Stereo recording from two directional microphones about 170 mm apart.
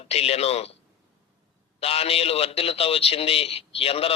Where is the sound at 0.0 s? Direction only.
40° left (ahead or behind).